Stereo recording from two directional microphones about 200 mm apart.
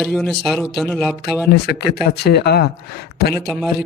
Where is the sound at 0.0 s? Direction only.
Centre (ahead or behind).